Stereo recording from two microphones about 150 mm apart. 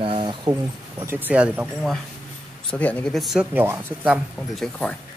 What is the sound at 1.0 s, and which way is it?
Speech, 15° right (ahead or behind).